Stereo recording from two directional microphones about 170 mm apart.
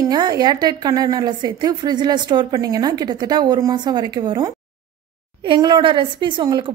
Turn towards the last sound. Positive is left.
turn(degrees=-25)  # may be behind; listen again after turning